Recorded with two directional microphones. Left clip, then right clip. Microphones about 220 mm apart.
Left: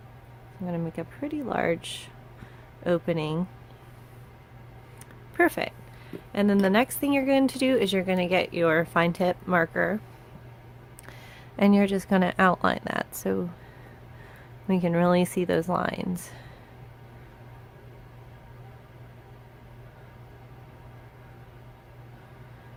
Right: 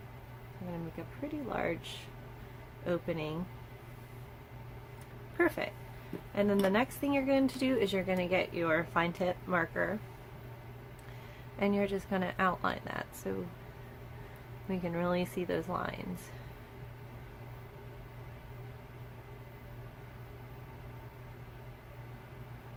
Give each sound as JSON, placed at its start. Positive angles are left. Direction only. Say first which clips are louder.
{"t": 1.0, "sound": "a woman's voice", "louder": "left 8 dB", "side_deg": 45}
{"t": 5.4, "sound": "a woman's voice", "louder": "left 7 dB", "side_deg": 40}
{"t": 11.6, "sound": "a woman's voice", "louder": "left 9 dB", "side_deg": 45}
{"t": 14.7, "sound": "a woman's voice", "louder": "left 10 dB", "side_deg": 45}